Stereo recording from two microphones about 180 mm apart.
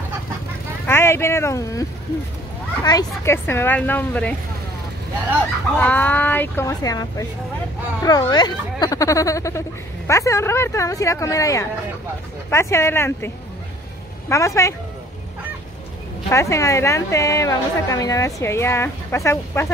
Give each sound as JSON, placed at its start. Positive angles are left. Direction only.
{"t": 0.8, "sound": "a woman's voice", "side_deg": 15}
{"t": 5.8, "sound": "a woman's voice", "side_deg": 10}
{"t": 14.3, "sound": "a woman's voice", "side_deg": 15}
{"t": 16.3, "sound": "a woman's voice", "side_deg": 15}